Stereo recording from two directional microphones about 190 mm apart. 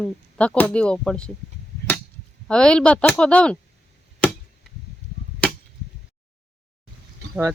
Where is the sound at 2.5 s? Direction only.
5° left (ahead or behind).